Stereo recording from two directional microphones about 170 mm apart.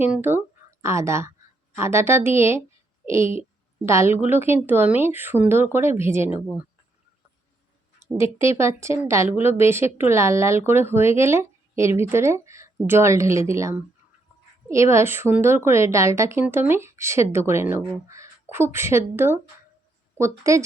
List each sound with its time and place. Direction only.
0.0 s a woman's voice: 10° right (ahead or behind)
3.8 s a woman's voice: 15° right (ahead or behind)
8.0 s a woman's voice: 15° right (ahead or behind)